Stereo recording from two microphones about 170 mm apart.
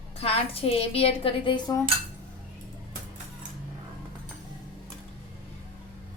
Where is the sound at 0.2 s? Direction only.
35° left (ahead or behind).